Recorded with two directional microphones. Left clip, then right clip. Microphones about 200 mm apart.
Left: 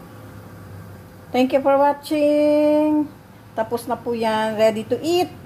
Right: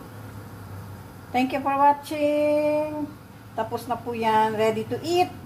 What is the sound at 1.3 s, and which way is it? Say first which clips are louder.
A woman's voice: left 7 dB; 40° left (ahead or behind).